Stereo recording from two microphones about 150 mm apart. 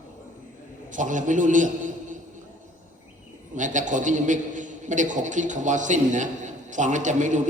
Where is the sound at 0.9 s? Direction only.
55° right (ahead or behind).